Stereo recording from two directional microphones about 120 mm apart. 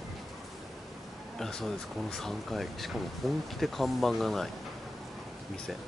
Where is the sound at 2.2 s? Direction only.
Centre (ahead or behind).